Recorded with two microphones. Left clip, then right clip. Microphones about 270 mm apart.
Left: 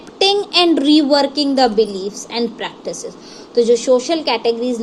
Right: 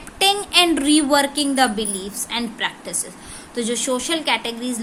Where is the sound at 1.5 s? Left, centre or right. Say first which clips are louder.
Left 7 dB; centre.